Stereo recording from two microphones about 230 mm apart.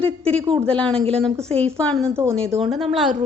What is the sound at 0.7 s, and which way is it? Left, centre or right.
A woman's voice, centre.